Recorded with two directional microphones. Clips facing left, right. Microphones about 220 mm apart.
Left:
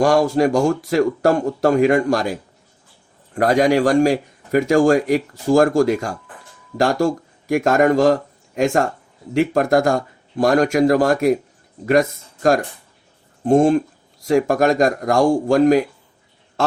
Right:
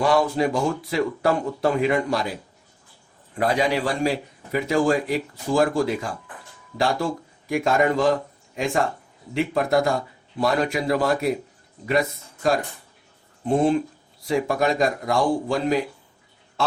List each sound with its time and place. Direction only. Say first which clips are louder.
0.0 s a man's voice: left 5 dB; 45° left (ahead or behind)
3.3 s a man's voice: left 7 dB; 45° left (ahead or behind)